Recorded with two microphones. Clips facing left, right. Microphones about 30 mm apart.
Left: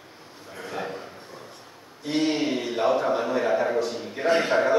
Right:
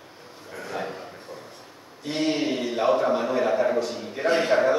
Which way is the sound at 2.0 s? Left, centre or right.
Centre.